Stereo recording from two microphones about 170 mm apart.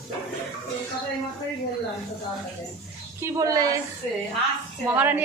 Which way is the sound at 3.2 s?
20° right (ahead or behind).